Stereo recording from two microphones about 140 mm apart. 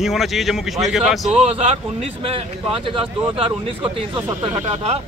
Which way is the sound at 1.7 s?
50° right (ahead or behind).